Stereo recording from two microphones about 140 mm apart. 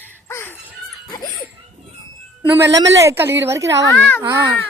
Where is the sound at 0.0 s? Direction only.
15° left (ahead or behind).